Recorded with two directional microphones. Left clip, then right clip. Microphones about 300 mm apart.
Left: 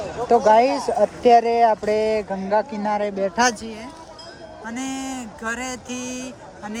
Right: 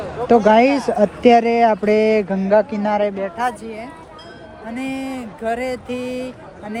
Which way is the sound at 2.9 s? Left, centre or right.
Centre.